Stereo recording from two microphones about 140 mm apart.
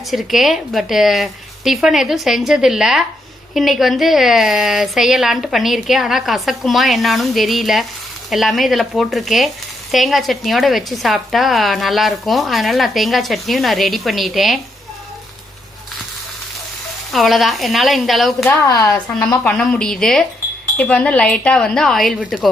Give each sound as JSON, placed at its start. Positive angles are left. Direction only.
{"t": 0.1, "sound": "a woman's voice", "side_deg": 0}
{"t": 17.1, "sound": "a woman's voice", "side_deg": 0}
{"t": 18.4, "sound": "speech", "side_deg": 20}
{"t": 18.9, "sound": "a woman's voice", "side_deg": 5}